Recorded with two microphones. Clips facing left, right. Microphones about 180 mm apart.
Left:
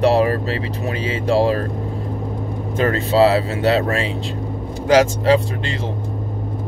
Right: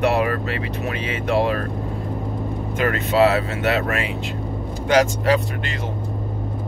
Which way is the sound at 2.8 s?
30° left (ahead or behind).